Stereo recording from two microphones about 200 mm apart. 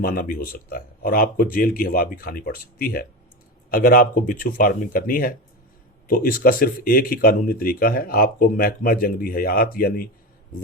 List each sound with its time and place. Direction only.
0.0 s speech: 50° left (ahead or behind)